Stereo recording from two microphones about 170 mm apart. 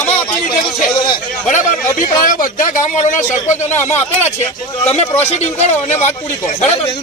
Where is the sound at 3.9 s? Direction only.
40° left (ahead or behind).